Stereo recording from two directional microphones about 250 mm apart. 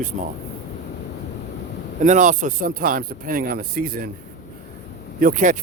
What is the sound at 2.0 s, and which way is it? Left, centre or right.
Speech, right.